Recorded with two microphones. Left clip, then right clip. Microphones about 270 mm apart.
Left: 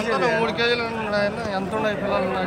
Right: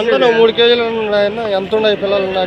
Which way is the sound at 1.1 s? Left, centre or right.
Right.